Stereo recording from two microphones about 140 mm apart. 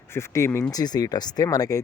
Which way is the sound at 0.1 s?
20° left (ahead or behind).